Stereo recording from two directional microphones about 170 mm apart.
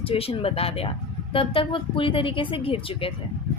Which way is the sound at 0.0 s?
35° left (ahead or behind).